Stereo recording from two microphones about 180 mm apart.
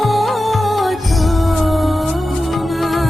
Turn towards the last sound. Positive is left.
turn(degrees=0)  # may be behind; listen again after turning